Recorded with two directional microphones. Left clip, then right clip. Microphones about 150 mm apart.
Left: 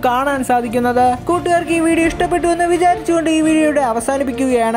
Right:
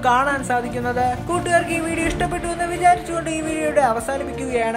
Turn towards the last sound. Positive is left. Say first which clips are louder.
# left 6 dB
turn(degrees=45)  # may be behind; listen again after turning